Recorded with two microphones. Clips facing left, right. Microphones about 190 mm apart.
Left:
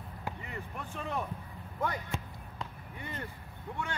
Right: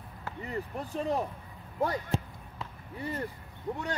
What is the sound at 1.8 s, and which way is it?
Speech, 35° right (ahead or behind).